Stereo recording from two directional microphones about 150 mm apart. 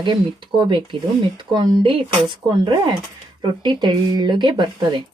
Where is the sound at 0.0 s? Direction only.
30° right (ahead or behind).